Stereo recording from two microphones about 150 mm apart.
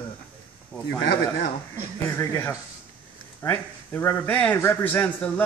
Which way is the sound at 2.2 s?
15° left (ahead or behind).